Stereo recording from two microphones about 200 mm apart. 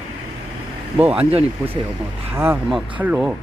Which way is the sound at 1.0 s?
10° right (ahead or behind).